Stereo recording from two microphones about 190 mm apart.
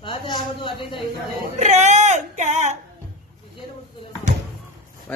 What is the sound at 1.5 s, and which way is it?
Speech, 35° right (ahead or behind).